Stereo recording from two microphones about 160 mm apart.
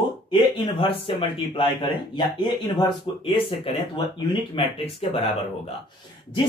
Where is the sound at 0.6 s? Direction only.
30° left (ahead or behind).